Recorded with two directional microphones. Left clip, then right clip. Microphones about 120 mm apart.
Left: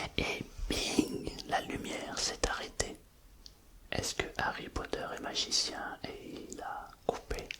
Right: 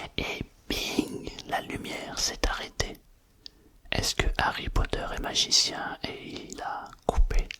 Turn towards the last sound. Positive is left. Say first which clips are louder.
# right 5 dB
turn(degrees=-25)  # may be behind; listen again after turning